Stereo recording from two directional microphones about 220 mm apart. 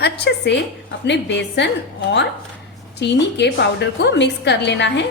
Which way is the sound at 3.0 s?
50° left (ahead or behind).